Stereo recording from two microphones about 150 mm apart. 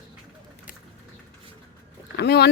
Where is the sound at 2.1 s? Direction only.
90° left.